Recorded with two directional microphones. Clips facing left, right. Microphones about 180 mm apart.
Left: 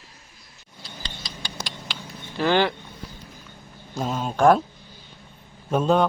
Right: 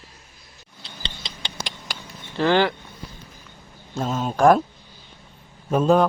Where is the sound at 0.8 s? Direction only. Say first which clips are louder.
Right 1 dB; 25° right (ahead or behind).